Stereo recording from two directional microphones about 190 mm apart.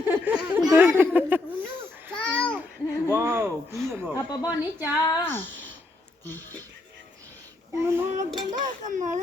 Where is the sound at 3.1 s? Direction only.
10° right (ahead or behind).